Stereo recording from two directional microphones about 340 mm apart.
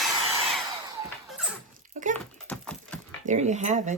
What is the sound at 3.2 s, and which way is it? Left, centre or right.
Speech, right.